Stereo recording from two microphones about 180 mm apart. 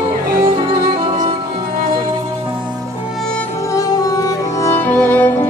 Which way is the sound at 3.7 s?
20° left (ahead or behind).